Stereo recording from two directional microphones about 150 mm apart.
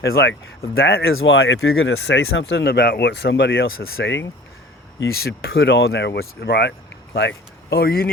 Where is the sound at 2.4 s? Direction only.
90° left.